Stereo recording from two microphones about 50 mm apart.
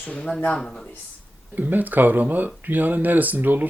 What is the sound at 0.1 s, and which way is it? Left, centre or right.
Speech, centre.